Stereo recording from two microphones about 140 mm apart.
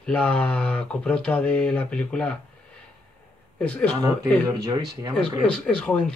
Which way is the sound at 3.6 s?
10° left (ahead or behind).